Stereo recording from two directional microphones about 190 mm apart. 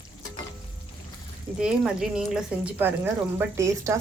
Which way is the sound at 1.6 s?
5° right (ahead or behind).